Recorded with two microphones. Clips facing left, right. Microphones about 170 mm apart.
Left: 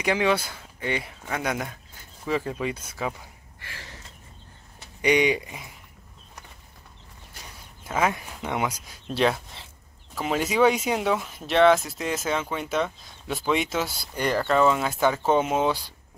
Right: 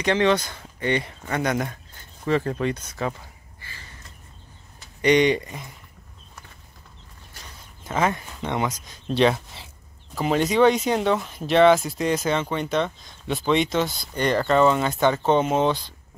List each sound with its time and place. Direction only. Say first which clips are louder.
0.0 s speech: right 3 dB; 5° left (ahead or behind)
3.5 s a sound: left 4 dB; 75° left (ahead or behind)
5.0 s speech: right 3 dB; 5° left (ahead or behind)
7.8 s speech: right 1 dB; 5° left (ahead or behind)